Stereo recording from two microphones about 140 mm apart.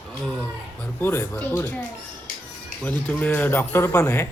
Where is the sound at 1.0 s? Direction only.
20° left (ahead or behind).